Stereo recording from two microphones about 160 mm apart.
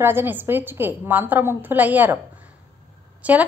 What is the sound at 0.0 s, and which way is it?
A woman's voice, 15° right (ahead or behind).